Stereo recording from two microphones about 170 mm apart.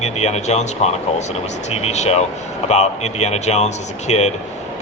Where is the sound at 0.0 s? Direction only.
40° left (ahead or behind).